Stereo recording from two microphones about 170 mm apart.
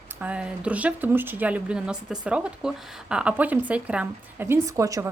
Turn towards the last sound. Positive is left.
turn(degrees=-20)  # may be behind; listen again after turning